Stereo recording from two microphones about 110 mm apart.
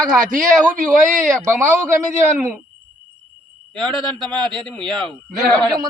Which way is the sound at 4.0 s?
45° right (ahead or behind).